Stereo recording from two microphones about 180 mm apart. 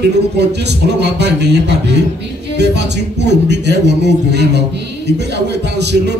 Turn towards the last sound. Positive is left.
turn(degrees=-70)  # may be behind; listen again after turning